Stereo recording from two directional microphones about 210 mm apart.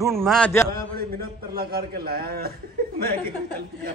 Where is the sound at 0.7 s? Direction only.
45° right (ahead or behind).